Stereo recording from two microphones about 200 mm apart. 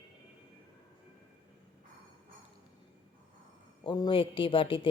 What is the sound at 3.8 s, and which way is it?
Speech, 20° left (ahead or behind).